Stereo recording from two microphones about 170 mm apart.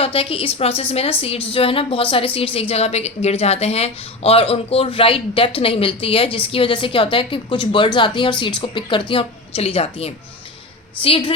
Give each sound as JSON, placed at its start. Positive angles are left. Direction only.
{"t": 0.0, "sound": "a woman's voice", "side_deg": 35}